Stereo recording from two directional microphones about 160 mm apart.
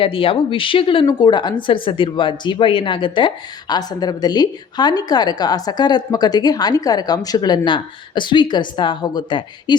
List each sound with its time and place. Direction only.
0.0 s speech: 35° left (ahead or behind)